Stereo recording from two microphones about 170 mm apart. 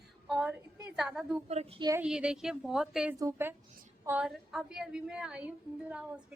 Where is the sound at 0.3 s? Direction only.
5° right (ahead or behind).